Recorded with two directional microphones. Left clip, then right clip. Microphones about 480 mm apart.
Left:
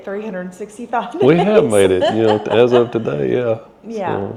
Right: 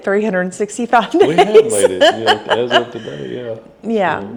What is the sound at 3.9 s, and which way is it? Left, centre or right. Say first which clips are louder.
Speech: right 5 dB; right.